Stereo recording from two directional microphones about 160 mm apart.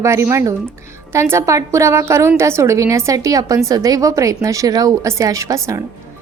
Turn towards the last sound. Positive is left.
turn(degrees=-20)  # may be behind; listen again after turning